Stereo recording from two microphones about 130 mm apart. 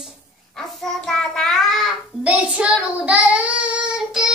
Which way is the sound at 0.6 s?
5° left (ahead or behind).